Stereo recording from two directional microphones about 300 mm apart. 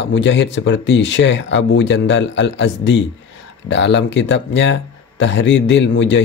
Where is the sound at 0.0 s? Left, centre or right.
Left.